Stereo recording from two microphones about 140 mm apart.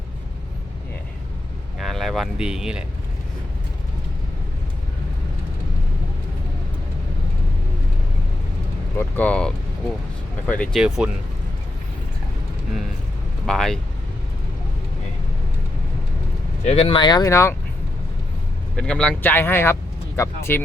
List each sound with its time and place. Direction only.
1.8 s speech: centre (ahead or behind)
9.0 s speech: 10° left (ahead or behind)
10.8 s speech: 5° right (ahead or behind)
13.5 s speech: centre (ahead or behind)
16.6 s speech: 45° left (ahead or behind); by 17.5 s 20° left (ahead or behind)
18.8 s speech: 5° left (ahead or behind)